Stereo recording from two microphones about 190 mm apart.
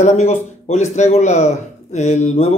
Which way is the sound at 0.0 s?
35° left (ahead or behind).